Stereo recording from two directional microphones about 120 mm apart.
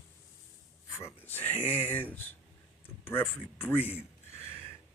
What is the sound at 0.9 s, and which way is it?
Speech, 20° left (ahead or behind).